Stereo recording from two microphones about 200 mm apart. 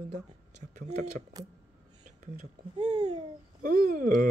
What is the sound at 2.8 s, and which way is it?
Babbling, 25° right (ahead or behind).